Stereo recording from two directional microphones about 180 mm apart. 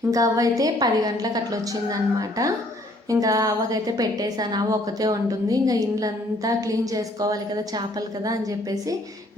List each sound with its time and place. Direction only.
0.1 s a woman's voice: 20° right (ahead or behind)